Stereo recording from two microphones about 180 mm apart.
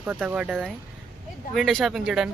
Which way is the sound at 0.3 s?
5° right (ahead or behind).